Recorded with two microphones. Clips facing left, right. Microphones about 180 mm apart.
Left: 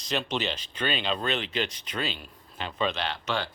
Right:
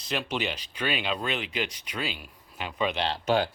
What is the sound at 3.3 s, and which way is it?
Speech, 45° right (ahead or behind).